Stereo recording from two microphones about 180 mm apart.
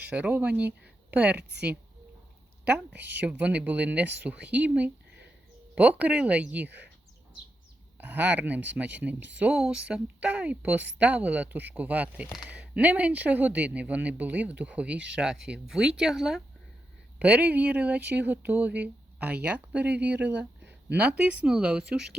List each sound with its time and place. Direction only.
0.1 s a woman's voice: 10° right (ahead or behind)
2.6 s a woman's voice: 10° right (ahead or behind)
7.9 s a woman's voice: 10° right (ahead or behind)